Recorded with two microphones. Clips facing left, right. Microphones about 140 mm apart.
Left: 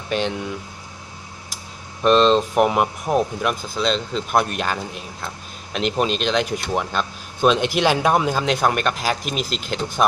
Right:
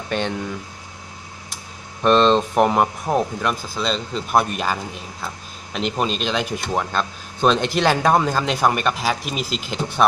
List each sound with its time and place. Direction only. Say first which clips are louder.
0.1 s speech: left 1 dB; 10° left (ahead or behind)
2.0 s speech: even; 10° left (ahead or behind)